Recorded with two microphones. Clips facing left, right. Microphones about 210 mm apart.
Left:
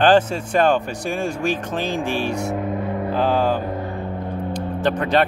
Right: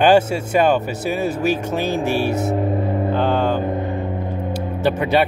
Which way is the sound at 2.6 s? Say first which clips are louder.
Right 4 dB; 30° right (ahead or behind).